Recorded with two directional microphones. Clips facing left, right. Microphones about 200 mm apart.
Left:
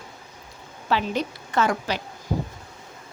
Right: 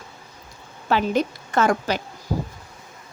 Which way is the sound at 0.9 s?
50° right (ahead or behind).